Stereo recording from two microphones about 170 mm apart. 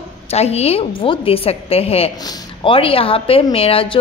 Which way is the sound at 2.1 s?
25° left (ahead or behind).